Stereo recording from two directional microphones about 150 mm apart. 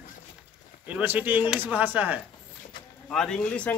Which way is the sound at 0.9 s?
10° right (ahead or behind).